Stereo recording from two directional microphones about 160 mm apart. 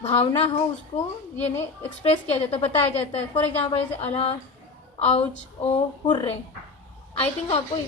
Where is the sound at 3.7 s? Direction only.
40° left (ahead or behind).